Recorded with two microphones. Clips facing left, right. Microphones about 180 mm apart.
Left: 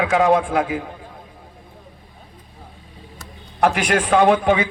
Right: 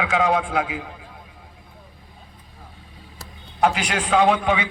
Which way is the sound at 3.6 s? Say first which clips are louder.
Left 3 dB; 55° left (ahead or behind).